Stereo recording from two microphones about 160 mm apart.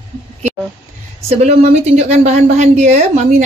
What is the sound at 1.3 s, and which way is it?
Speech, 40° right (ahead or behind).